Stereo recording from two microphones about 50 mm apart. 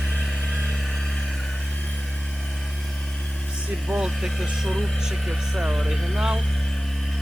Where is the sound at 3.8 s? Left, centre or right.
Centre.